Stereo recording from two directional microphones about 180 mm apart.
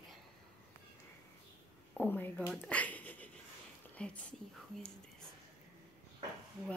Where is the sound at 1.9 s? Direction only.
10° left (ahead or behind).